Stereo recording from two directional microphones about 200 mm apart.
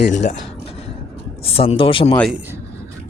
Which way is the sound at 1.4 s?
30° left (ahead or behind).